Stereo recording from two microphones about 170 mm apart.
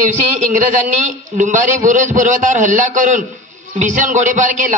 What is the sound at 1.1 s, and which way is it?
Speech, 45° right (ahead or behind).